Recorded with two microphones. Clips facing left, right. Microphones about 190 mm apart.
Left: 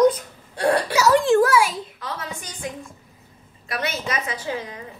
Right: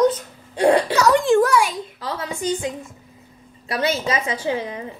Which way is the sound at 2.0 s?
30° right (ahead or behind).